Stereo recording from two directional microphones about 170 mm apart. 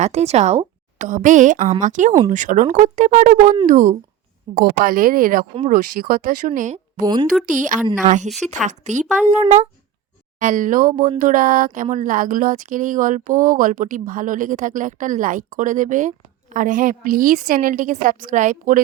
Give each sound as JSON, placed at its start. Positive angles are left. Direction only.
{"t": 0.0, "sound": "a woman's voice", "side_deg": -40}
{"t": 7.0, "sound": "a sound", "side_deg": -25}
{"t": 7.4, "sound": "speech", "side_deg": -50}